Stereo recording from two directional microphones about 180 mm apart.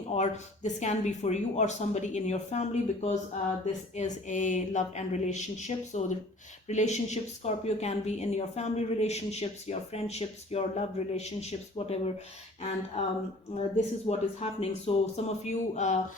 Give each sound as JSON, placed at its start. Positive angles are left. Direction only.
{"t": 0.1, "sound": "speech", "side_deg": 40}
{"t": 13.0, "sound": "speech", "side_deg": 35}